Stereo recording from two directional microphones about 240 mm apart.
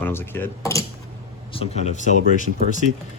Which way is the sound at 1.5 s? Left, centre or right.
Left.